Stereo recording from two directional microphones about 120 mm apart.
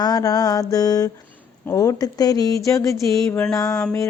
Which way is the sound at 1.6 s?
25° left (ahead or behind).